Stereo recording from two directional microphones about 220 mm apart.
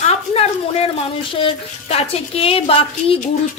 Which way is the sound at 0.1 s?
30° left (ahead or behind).